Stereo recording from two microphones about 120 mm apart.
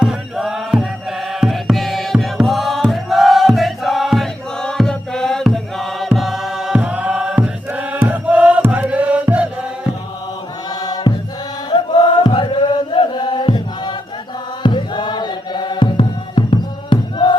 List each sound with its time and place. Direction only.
0.0 s music: 5° right (ahead or behind)
10.7 s music: 35° left (ahead or behind)
11.7 s chant: 40° left (ahead or behind)
14.6 s music: 40° left (ahead or behind)